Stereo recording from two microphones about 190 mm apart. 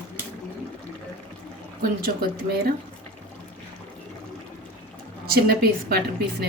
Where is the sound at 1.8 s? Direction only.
50° right (ahead or behind).